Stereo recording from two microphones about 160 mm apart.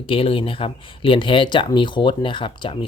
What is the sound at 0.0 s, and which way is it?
Speech, 35° left (ahead or behind).